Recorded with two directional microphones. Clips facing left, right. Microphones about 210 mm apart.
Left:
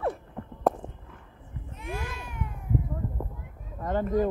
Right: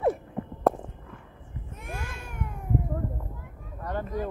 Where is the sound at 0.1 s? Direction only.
5° right (ahead or behind).